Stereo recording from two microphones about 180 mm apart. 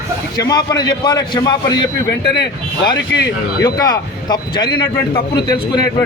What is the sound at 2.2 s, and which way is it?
Speech, 70° left (ahead or behind).